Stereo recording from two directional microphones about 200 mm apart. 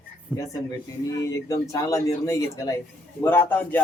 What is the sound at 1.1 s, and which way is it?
Speech, 15° left (ahead or behind).